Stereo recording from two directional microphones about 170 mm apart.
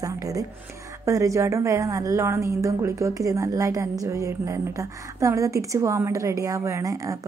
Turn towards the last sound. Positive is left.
turn(degrees=-20)  # may be behind; listen again after turning